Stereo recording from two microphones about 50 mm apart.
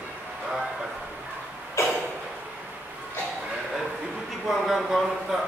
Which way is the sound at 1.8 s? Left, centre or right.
Left.